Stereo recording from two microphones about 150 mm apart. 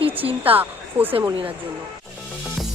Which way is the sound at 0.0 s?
40° right (ahead or behind).